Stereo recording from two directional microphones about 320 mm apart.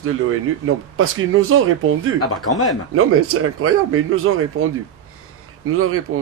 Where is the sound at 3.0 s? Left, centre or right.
Right.